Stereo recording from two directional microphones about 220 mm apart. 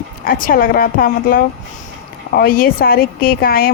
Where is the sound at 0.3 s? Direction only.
40° left (ahead or behind).